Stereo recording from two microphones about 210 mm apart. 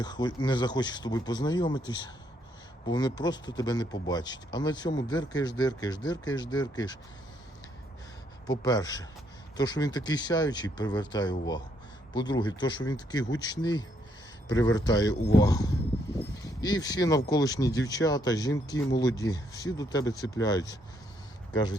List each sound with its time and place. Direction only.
0.0 s speech: 20° left (ahead or behind)
8.4 s speech: 20° left (ahead or behind)